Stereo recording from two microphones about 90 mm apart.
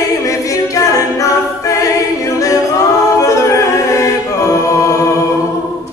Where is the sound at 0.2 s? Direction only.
40° left (ahead or behind).